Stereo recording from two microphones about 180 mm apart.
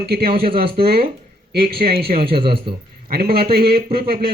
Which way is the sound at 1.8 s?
55° right (ahead or behind).